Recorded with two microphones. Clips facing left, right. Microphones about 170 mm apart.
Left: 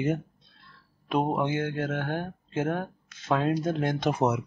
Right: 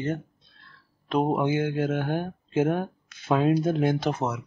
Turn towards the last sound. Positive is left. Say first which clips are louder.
# left 4 dB
turn(degrees=20)  # may be behind; listen again after turning